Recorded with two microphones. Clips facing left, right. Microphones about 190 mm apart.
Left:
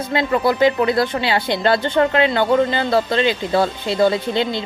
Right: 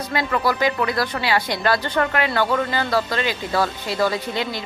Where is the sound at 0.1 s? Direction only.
25° left (ahead or behind).